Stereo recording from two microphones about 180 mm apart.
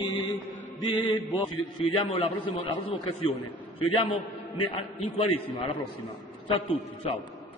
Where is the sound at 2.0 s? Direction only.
30° left (ahead or behind).